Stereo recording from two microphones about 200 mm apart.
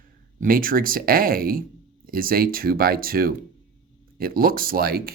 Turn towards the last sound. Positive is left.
turn(degrees=-50)  # may be behind; listen again after turning